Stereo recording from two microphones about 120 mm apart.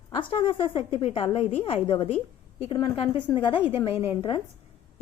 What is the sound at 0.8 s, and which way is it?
A woman's voice, 55° left (ahead or behind).